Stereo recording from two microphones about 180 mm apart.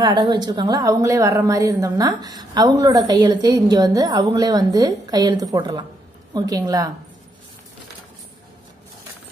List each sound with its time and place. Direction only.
0.0 s a woman's voice: 25° right (ahead or behind)